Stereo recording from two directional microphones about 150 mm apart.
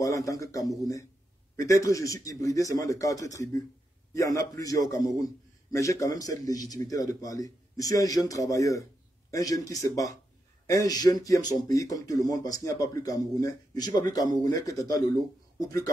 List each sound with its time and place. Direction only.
0.0 s speech: 20° left (ahead or behind)